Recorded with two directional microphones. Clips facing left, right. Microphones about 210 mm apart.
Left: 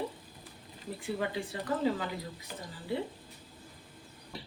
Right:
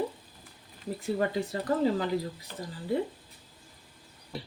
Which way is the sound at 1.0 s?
40° right (ahead or behind).